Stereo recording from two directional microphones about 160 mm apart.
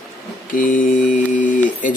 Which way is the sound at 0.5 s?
55° left (ahead or behind).